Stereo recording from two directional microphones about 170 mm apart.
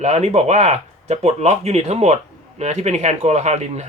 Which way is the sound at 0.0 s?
40° right (ahead or behind).